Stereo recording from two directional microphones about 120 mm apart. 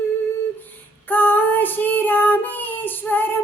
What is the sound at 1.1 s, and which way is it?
Child singing, 15° left (ahead or behind).